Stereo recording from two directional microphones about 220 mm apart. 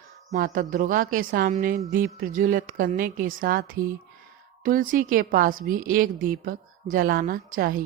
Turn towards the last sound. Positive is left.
turn(degrees=-40)  # may be behind; listen again after turning